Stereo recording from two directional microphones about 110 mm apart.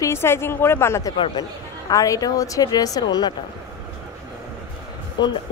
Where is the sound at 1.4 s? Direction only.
35° left (ahead or behind).